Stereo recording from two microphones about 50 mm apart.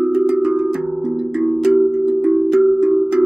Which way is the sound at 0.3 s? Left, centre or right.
Centre.